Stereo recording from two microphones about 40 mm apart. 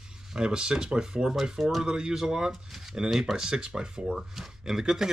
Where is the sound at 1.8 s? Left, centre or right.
Right.